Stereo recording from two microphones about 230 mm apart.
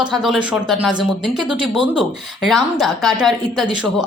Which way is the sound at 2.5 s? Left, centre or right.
Centre.